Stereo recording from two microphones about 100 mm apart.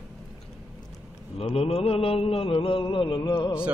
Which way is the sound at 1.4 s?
85° left.